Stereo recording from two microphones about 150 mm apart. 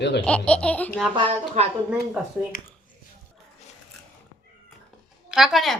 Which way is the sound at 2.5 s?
75° left (ahead or behind).